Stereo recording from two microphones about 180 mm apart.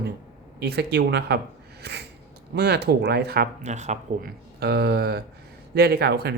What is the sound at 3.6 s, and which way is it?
Speech, 40° right (ahead or behind).